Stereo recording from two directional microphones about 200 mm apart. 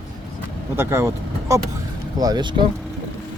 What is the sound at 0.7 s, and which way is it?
Speech, 10° right (ahead or behind).